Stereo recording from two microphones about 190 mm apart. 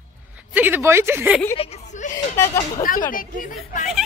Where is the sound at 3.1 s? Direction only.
45° left (ahead or behind).